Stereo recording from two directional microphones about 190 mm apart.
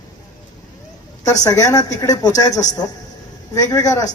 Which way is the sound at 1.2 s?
20° left (ahead or behind).